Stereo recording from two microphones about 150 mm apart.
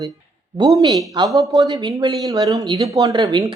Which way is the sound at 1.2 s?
30° right (ahead or behind).